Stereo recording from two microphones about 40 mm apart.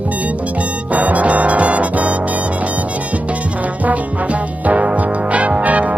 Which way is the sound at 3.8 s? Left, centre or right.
Right.